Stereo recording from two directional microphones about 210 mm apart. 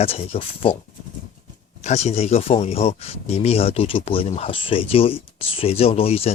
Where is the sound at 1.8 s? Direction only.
30° left (ahead or behind).